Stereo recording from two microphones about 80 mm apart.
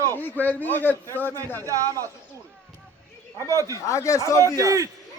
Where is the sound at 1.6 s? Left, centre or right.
Right.